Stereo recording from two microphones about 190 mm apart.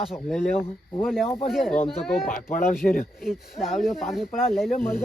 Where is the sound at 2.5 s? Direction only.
45° left (ahead or behind).